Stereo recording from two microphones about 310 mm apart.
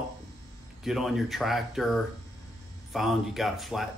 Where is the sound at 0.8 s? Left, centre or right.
Centre.